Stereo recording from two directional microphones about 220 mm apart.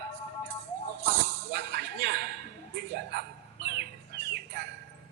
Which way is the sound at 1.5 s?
50° right (ahead or behind).